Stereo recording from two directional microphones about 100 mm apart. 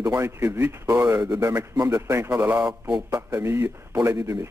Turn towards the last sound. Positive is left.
turn(degrees=-30)  # may be behind; listen again after turning